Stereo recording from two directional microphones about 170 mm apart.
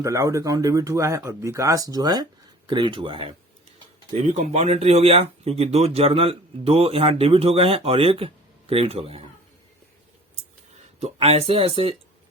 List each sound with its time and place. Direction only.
0.0 s speech: 20° right (ahead or behind); by 9.2 s 35° right (ahead or behind)
11.0 s speech: 35° right (ahead or behind)